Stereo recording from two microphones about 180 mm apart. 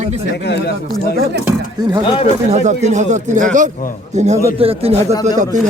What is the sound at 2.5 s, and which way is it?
A man's voice, 40° right (ahead or behind).